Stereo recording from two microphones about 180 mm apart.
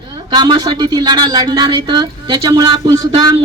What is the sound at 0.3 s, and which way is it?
Speech, 25° right (ahead or behind).